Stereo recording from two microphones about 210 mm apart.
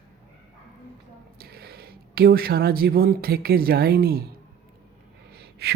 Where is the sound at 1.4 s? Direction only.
45° right (ahead or behind).